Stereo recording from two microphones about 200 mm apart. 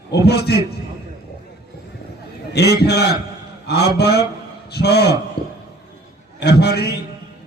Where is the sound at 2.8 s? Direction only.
55° left (ahead or behind).